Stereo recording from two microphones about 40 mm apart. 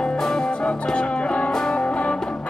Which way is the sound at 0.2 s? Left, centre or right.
Centre.